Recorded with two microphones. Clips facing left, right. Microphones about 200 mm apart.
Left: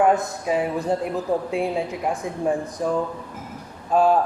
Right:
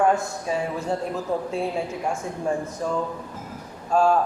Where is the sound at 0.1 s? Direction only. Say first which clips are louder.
Left 3 dB; 20° left (ahead or behind).